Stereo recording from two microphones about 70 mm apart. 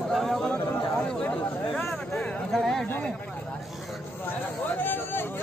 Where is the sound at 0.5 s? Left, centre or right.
Left.